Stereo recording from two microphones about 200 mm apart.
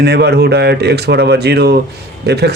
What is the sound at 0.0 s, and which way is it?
A man's voice, 55° right (ahead or behind).